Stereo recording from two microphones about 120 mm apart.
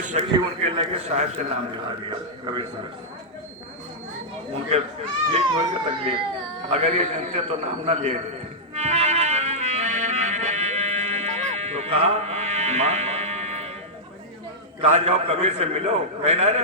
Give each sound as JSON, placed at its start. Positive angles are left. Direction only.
{"t": 0.0, "sound": "a sound", "side_deg": -90}
{"t": 0.6, "sound": "a man's voice", "side_deg": -55}
{"t": 5.3, "sound": "speech", "side_deg": -45}
{"t": 6.7, "sound": "a man's voice", "side_deg": -60}
{"t": 8.7, "sound": "music", "side_deg": -65}
{"t": 14.8, "sound": "a man's voice", "side_deg": -65}